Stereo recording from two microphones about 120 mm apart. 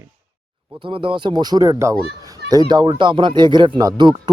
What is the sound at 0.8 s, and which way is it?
Speech, 45° right (ahead or behind).